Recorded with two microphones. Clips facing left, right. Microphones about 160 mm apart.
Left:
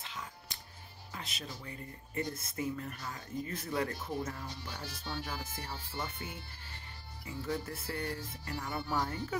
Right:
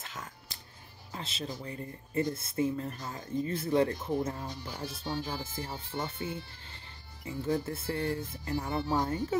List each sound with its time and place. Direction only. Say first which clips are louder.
0.0 s music: right 1 dB; 45° right (ahead or behind)
1.1 s speech: right 6 dB; 30° right (ahead or behind)